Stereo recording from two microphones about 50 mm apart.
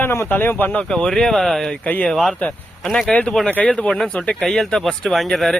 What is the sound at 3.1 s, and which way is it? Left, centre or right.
Speech, centre.